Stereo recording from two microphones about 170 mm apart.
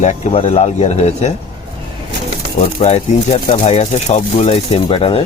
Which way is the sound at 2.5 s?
40° left (ahead or behind).